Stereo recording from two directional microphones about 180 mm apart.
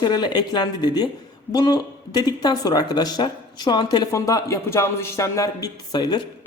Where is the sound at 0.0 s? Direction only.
25° left (ahead or behind).